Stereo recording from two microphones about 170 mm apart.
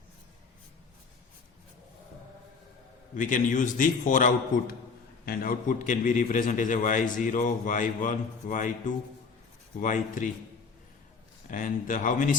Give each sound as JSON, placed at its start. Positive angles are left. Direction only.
{"t": 3.2, "sound": "a man's voice", "side_deg": 50}
{"t": 11.4, "sound": "a man's voice", "side_deg": 50}